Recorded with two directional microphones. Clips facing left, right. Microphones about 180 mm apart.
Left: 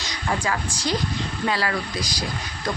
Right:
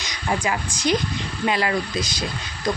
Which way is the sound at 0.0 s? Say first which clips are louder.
Right 1 dB; 20° right (ahead or behind).